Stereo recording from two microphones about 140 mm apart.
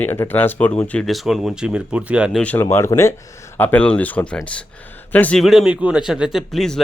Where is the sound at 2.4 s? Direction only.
15° left (ahead or behind).